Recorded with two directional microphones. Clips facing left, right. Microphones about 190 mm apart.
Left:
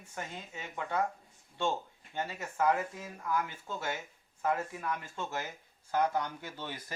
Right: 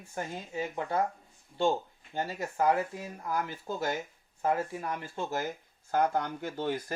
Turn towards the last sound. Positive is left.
turn(degrees=-50)  # may be behind; listen again after turning